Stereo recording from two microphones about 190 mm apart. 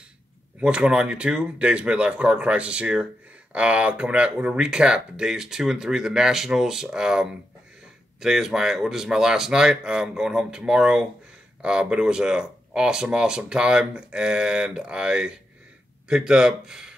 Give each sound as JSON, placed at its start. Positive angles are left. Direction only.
{"t": 0.6, "sound": "speech", "side_deg": -5}